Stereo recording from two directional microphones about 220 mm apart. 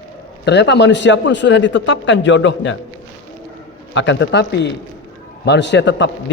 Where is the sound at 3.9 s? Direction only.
55° left (ahead or behind).